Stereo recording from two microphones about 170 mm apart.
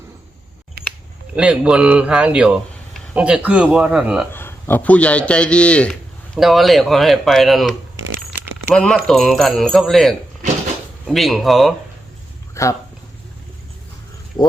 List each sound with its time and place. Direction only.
0.8 s camera: 65° right (ahead or behind)
1.4 s a man's voice: 5° right (ahead or behind)
4.3 s a man's voice: 15° left (ahead or behind)
8.7 s speech: 5° left (ahead or behind)
12.6 s a man's voice: 15° left (ahead or behind)